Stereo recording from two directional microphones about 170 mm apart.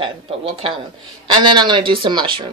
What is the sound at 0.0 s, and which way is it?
A woman's voice, 35° right (ahead or behind).